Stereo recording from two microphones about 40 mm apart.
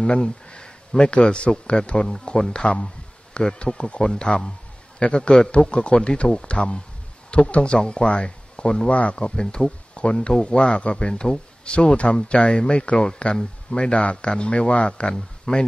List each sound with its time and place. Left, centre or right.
0.2 s a man's voice: left